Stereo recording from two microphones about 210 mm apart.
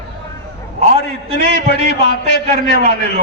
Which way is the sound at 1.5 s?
55° left (ahead or behind).